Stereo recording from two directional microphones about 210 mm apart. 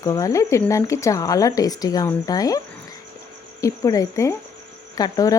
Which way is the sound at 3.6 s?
15° left (ahead or behind).